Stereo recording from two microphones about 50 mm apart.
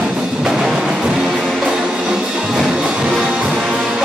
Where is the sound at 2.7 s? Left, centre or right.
Centre.